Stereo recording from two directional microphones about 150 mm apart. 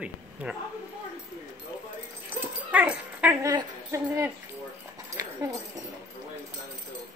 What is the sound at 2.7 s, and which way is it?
Dog, 10° right (ahead or behind).